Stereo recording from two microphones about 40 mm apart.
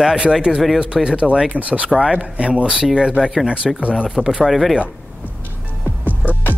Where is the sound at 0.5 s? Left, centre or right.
Centre.